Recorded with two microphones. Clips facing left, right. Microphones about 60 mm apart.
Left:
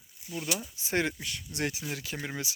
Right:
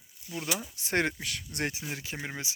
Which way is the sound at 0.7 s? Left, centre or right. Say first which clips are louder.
Right 1 dB; right.